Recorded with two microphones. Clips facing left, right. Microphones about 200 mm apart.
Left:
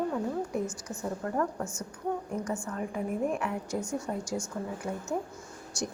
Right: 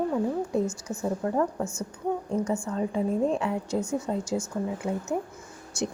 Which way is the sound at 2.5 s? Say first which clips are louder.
Right 6 dB; 25° right (ahead or behind).